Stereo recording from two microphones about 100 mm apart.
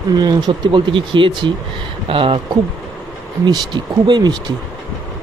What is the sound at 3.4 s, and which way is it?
Speech, 45° right (ahead or behind).